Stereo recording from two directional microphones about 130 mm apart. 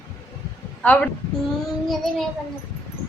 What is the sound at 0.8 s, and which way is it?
A child's voice, 10° left (ahead or behind).